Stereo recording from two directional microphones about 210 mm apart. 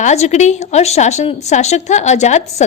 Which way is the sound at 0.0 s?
35° left (ahead or behind).